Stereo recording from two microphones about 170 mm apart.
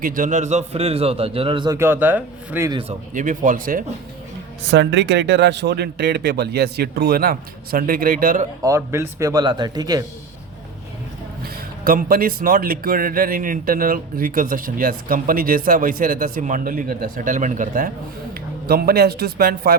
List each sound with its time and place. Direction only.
0.0 s a man's voice: 50° right (ahead or behind); by 1.8 s 25° right (ahead or behind)
1.8 s a man's voice: 10° right (ahead or behind)
3.1 s speech: 50° right (ahead or behind)
4.7 s a man's voice: 90° right; by 8.4 s 55° right (ahead or behind)
8.6 s speech: 15° right (ahead or behind)
11.9 s a man's voice: 55° right (ahead or behind)
18.7 s a man's voice: 65° right (ahead or behind)